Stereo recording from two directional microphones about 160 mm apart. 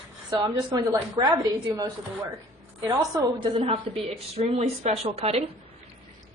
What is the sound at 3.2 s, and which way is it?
A woman's voice, 30° right (ahead or behind).